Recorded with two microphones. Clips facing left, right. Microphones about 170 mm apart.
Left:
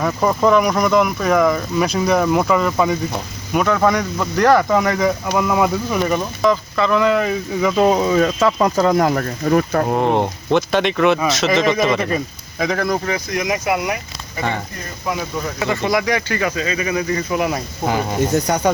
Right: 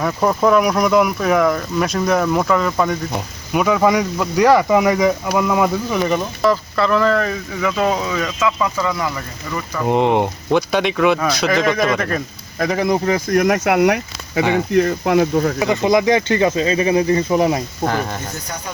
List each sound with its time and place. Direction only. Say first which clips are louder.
0.0 s speech: even; centre (ahead or behind)
7.0 s speech: left 1 dB; 15° left (ahead or behind); by 9.8 s 60° left (ahead or behind)
9.9 s speech: right 4 dB; 20° right (ahead or behind)
10.5 s speech: left 1 dB; 5° right (ahead or behind)
13.1 s speech: right 6 dB; 50° right (ahead or behind)
15.5 s speech: left 1 dB; 15° right (ahead or behind)
17.8 s speech: left 1 dB; 10° left (ahead or behind)
18.4 s speech: left 12 dB; 75° left (ahead or behind)